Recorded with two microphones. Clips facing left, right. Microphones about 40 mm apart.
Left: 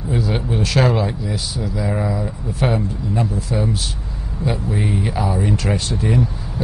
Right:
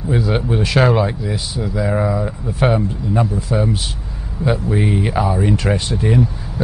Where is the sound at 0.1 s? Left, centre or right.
Centre.